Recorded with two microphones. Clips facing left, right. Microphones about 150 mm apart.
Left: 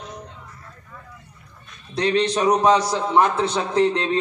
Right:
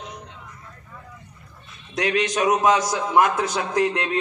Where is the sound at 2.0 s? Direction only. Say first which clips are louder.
Left 2 dB; 30° left (ahead or behind).